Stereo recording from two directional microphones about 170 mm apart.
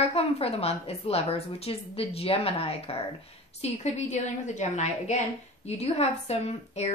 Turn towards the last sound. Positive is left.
turn(degrees=40)  # may be behind; listen again after turning